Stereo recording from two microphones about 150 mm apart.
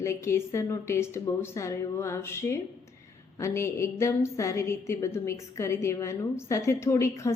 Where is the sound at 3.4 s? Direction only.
20° left (ahead or behind).